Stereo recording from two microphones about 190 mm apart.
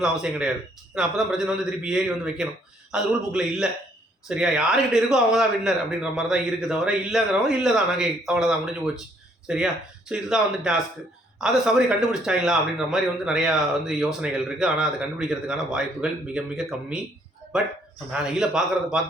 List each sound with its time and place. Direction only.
0.0 s a man's voice: 5° right (ahead or behind)
18.1 s a man's voice: 5° right (ahead or behind)